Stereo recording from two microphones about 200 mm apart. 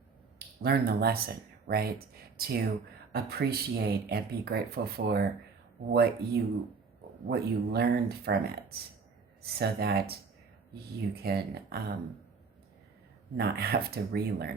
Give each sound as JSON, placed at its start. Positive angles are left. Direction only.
{"t": 0.3, "sound": "speech", "side_deg": -50}
{"t": 13.3, "sound": "speech", "side_deg": -50}